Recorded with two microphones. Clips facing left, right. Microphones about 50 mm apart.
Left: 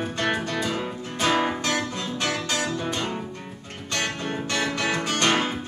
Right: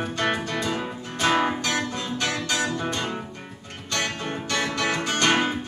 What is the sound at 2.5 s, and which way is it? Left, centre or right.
Music, right.